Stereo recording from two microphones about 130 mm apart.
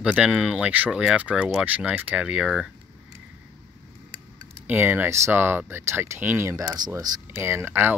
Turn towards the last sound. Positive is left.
turn(degrees=-15)  # may be behind; listen again after turning